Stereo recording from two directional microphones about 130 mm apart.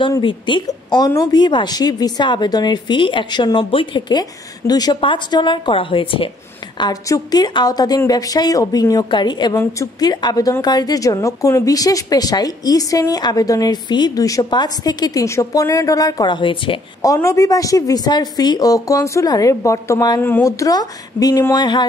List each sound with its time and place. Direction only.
0.0 s speech: 40° left (ahead or behind)
6.8 s a woman's voice: 30° left (ahead or behind)
17.0 s a woman's voice: 25° left (ahead or behind)
20.2 s a woman's voice: 15° left (ahead or behind); by 21.8 s 35° left (ahead or behind)